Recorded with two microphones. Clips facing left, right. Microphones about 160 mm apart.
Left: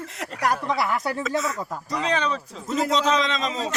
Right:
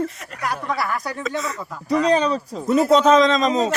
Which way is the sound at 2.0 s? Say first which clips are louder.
Right 5 dB; 35° right (ahead or behind).